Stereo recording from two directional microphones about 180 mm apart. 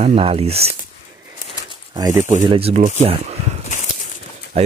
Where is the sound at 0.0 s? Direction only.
35° right (ahead or behind).